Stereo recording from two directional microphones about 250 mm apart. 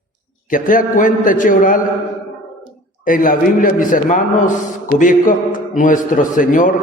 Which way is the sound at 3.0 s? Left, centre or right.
Left.